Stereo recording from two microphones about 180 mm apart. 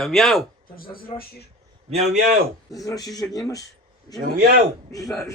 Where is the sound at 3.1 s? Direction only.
20° left (ahead or behind).